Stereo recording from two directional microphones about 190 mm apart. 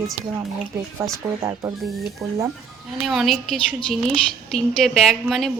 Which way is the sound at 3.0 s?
Centre (ahead or behind).